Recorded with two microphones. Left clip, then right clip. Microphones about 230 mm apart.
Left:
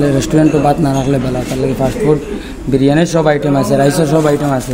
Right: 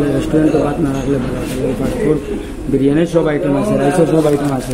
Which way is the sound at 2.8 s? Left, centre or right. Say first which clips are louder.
Left 2 dB; left.